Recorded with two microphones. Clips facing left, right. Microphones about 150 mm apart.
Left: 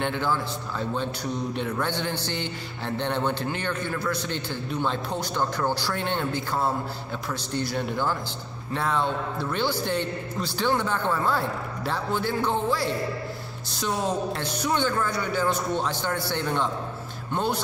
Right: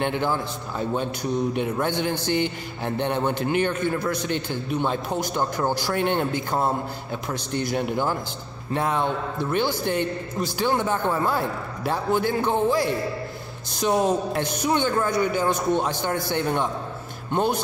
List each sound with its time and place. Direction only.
0.0 s a man's voice: 15° right (ahead or behind)